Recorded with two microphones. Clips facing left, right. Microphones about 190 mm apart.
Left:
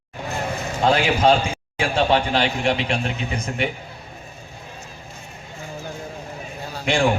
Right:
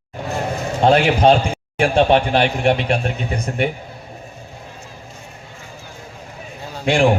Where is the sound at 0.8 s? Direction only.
55° right (ahead or behind).